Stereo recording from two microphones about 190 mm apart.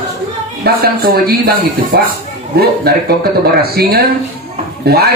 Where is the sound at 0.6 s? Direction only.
55° right (ahead or behind).